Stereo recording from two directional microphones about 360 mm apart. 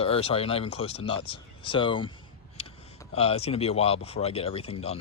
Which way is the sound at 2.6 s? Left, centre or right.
Centre.